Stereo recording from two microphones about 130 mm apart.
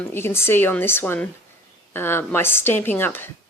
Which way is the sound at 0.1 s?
20° left (ahead or behind).